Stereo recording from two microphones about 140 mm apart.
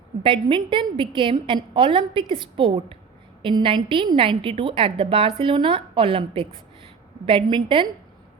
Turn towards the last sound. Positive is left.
turn(degrees=-35)  # may be behind; listen again after turning